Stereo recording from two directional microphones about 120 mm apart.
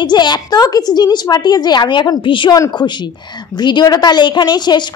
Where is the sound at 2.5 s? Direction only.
30° left (ahead or behind).